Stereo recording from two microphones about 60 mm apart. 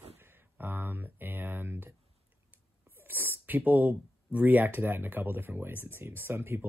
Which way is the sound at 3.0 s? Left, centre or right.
Right.